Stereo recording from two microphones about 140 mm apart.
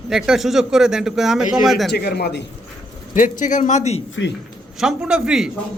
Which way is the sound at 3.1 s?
70° left (ahead or behind).